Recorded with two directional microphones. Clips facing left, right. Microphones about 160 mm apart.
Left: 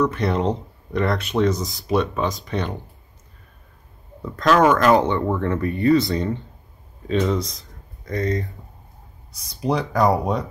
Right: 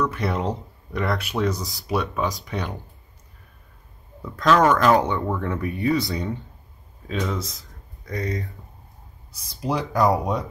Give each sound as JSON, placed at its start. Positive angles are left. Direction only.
{"t": 0.1, "sound": "speech", "side_deg": -5}
{"t": 4.5, "sound": "speech", "side_deg": 5}
{"t": 5.0, "sound": "speech", "side_deg": 0}
{"t": 9.6, "sound": "speech", "side_deg": -5}